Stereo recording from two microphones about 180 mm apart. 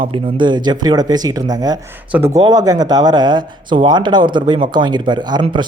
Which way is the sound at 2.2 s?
35° right (ahead or behind).